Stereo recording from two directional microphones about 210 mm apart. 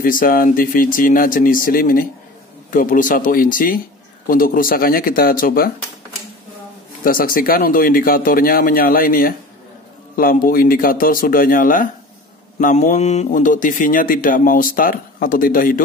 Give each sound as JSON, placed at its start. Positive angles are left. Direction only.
{"t": 0.0, "sound": "speech", "side_deg": 40}
{"t": 7.1, "sound": "speech", "side_deg": 40}